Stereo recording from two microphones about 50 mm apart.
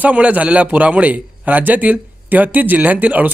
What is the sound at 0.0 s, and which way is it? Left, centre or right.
Speech, right.